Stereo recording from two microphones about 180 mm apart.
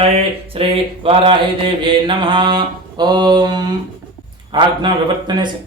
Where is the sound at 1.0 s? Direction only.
30° right (ahead or behind).